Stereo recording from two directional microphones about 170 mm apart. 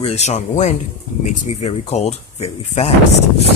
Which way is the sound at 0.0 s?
40° left (ahead or behind).